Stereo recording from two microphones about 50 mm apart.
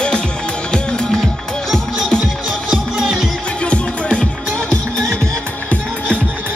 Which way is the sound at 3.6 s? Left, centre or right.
Left.